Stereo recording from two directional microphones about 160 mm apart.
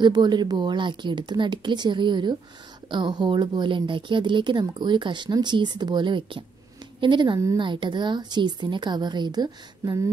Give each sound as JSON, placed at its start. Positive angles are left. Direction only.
{"t": 0.0, "sound": "speech", "side_deg": -25}